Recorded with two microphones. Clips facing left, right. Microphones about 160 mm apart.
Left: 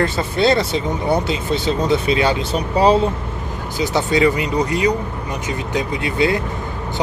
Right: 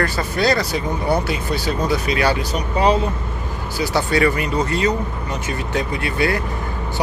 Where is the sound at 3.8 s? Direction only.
20° left (ahead or behind).